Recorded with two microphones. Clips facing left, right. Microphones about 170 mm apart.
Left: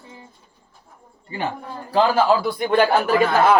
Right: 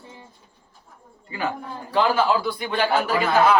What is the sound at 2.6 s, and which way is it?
Speech, 50° left (ahead or behind).